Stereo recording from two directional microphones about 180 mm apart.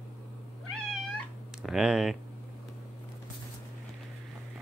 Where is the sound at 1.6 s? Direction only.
5° right (ahead or behind).